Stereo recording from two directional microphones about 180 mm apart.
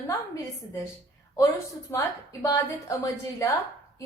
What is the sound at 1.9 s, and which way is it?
A woman's voice, 15° left (ahead or behind).